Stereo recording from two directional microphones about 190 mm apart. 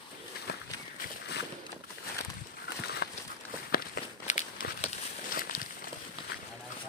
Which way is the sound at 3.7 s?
50° left (ahead or behind).